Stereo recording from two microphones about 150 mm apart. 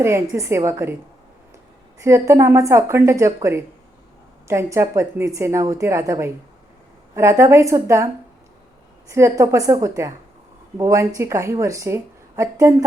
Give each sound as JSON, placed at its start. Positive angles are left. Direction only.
{"t": 0.0, "sound": "a woman's voice", "side_deg": -20}
{"t": 2.0, "sound": "speech", "side_deg": -20}
{"t": 9.0, "sound": "speech", "side_deg": -20}